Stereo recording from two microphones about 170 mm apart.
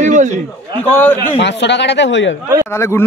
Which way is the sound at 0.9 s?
10° left (ahead or behind).